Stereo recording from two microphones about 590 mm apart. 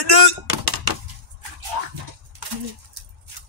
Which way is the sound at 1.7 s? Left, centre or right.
Right.